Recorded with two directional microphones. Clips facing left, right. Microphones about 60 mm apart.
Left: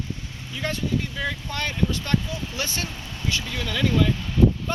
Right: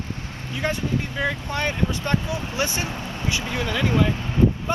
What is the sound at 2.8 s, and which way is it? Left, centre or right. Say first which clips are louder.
Speech: right 5 dB; right.